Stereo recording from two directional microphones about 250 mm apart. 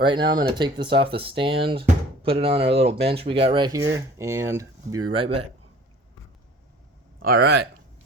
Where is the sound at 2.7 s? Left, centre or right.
Right.